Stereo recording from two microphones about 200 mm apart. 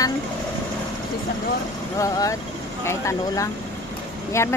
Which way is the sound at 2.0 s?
15° left (ahead or behind).